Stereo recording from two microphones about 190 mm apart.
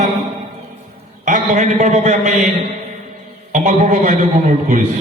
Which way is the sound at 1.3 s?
40° right (ahead or behind).